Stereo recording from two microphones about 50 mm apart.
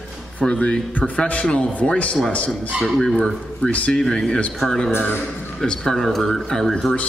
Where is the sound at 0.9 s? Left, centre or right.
Left.